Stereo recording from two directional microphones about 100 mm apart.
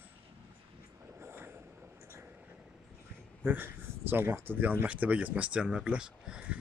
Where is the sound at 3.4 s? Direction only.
20° right (ahead or behind).